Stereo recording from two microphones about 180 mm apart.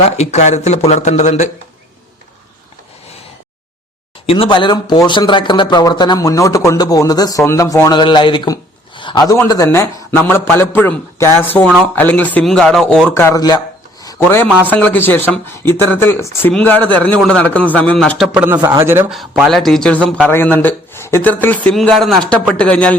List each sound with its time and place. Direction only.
0.0 s speech: 35° left (ahead or behind)
4.3 s a man's voice: 30° left (ahead or behind)
14.0 s a sound: 15° left (ahead or behind)
14.7 s a man's voice: 10° left (ahead or behind)
18.5 s speech: 20° right (ahead or behind)
19.1 s a man's voice: centre (ahead or behind)